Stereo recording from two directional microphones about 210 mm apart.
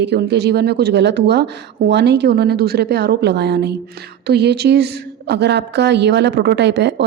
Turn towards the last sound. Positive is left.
turn(degrees=-55)  # may be behind; listen again after turning